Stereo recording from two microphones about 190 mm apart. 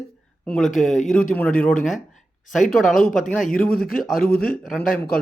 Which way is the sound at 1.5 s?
45° left (ahead or behind).